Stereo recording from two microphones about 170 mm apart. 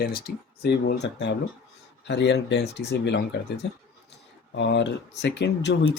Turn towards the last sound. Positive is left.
turn(degrees=90)